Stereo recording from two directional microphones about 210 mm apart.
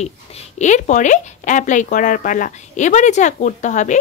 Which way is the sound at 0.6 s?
35° left (ahead or behind).